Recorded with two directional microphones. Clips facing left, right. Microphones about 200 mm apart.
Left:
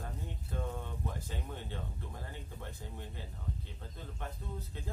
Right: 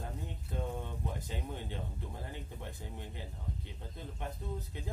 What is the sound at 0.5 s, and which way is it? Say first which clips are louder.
Speech: right 1 dB; 15° right (ahead or behind).